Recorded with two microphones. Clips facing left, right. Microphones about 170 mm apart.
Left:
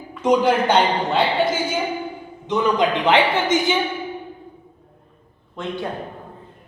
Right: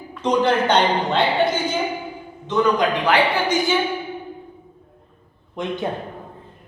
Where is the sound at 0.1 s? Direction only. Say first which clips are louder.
Left 2 dB; 10° left (ahead or behind).